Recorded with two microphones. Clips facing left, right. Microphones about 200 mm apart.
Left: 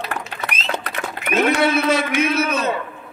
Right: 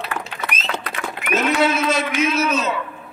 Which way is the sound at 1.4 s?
60° left (ahead or behind).